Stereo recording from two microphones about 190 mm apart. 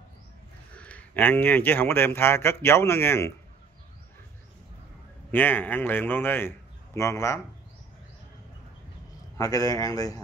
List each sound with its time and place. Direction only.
0.7 s speech: 5° left (ahead or behind)
5.3 s a man's voice: 10° left (ahead or behind)
9.4 s a man's voice: 20° left (ahead or behind)